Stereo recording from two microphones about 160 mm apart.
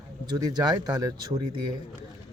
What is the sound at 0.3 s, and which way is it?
Speech, 25° right (ahead or behind).